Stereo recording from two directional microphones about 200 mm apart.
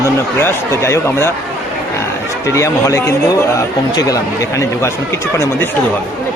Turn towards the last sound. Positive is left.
turn(degrees=10)  # may be behind; listen again after turning